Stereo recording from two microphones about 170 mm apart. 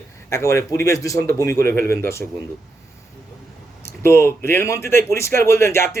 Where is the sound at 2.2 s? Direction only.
Centre (ahead or behind).